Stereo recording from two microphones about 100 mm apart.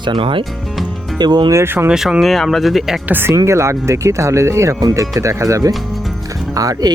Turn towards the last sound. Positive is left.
turn(degrees=-35)  # may be behind; listen again after turning